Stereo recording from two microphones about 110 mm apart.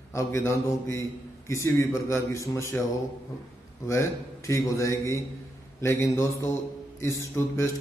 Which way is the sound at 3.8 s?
25° left (ahead or behind).